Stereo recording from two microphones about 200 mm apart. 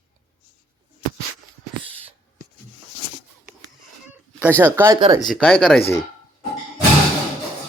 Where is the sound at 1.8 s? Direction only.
30° right (ahead or behind).